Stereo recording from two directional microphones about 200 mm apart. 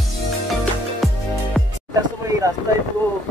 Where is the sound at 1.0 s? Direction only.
Centre (ahead or behind).